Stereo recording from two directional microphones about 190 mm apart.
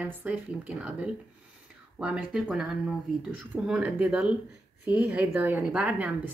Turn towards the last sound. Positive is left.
turn(degrees=-10)  # may be behind; listen again after turning